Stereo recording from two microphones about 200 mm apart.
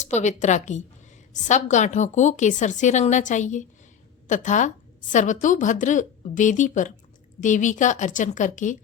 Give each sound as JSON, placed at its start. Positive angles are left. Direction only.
{"t": 0.1, "sound": "a woman's voice", "side_deg": 35}